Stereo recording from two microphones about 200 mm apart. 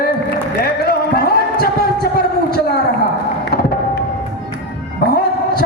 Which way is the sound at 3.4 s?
55° left (ahead or behind).